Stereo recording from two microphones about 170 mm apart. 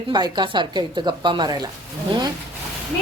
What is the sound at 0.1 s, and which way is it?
Speech, 25° right (ahead or behind).